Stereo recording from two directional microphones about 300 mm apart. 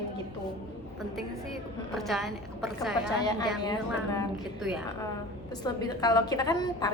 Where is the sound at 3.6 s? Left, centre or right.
Centre.